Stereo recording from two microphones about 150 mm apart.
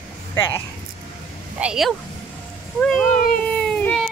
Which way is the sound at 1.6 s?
5° right (ahead or behind).